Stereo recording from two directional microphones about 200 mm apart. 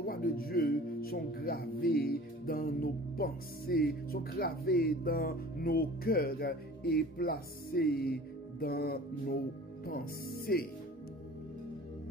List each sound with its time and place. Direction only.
0.0 s speech: 45° left (ahead or behind)